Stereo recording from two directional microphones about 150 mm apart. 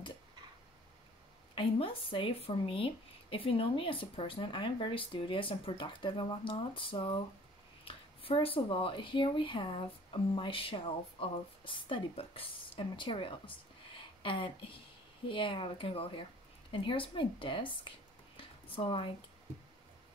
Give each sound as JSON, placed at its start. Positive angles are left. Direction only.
{"t": 1.5, "sound": "speech", "side_deg": 35}